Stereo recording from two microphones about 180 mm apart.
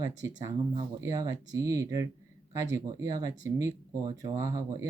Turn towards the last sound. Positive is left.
turn(degrees=-20)  # may be behind; listen again after turning